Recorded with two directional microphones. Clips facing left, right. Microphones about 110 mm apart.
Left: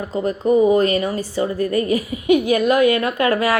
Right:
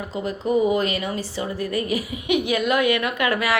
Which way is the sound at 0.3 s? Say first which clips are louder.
Left 5 dB; 40° left (ahead or behind).